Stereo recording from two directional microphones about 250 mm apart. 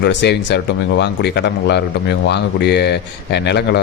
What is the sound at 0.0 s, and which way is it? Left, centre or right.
A man's voice, left.